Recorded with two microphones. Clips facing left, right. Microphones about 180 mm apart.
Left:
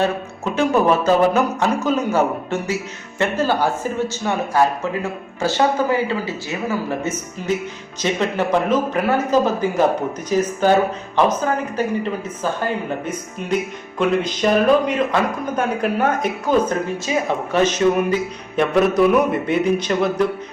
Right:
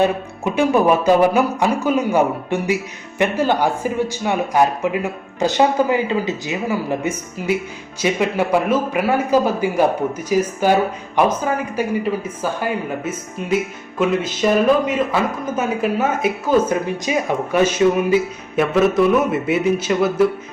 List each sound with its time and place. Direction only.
0.0 s a man's voice: 15° right (ahead or behind)